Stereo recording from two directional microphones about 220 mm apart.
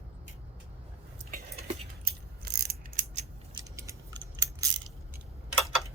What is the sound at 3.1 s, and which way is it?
Scissors, 30° right (ahead or behind).